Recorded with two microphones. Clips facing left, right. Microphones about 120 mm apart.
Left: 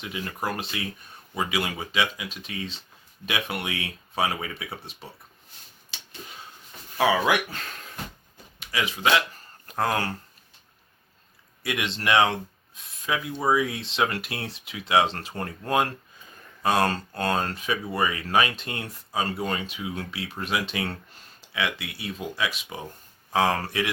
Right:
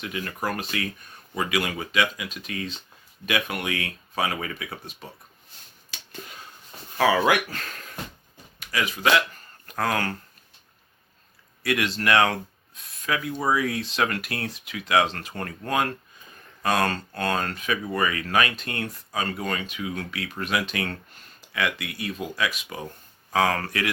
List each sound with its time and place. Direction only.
0.0 s speech: 20° left (ahead or behind)
7.0 s speech: 20° left (ahead or behind)
8.5 s a sound: 25° left (ahead or behind)
9.6 s speech: 25° left (ahead or behind)
11.6 s speech: 20° left (ahead or behind)